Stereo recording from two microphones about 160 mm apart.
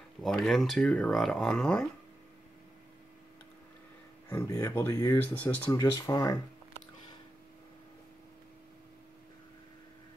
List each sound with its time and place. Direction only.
0.2 s speech: centre (ahead or behind)
4.3 s speech: 20° left (ahead or behind)
5.7 s speech: 20° left (ahead or behind)